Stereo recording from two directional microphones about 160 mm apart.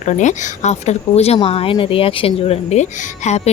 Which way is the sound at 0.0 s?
50° left (ahead or behind).